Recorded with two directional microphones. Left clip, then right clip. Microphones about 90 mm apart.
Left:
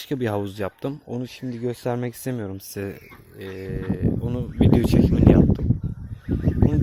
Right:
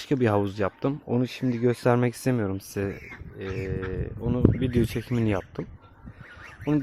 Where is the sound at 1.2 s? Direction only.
50° right (ahead or behind).